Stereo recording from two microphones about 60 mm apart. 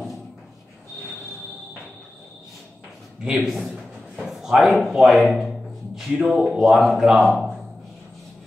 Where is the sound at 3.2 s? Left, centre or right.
Centre.